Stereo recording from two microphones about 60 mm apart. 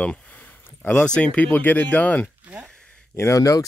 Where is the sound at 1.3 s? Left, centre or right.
Left.